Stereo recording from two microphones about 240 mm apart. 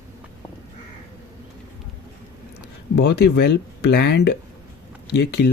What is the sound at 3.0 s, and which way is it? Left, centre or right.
Speech, left.